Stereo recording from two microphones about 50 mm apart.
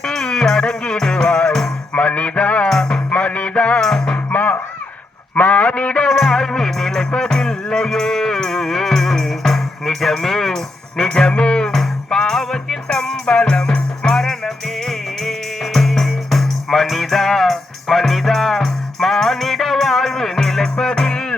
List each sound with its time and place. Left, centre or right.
0.0 s music: centre
2.6 s music: centre
3.1 s music: left
3.8 s music: centre
4.3 s music: left
5.3 s a sound: left
6.1 s music: centre
7.0 s music: centre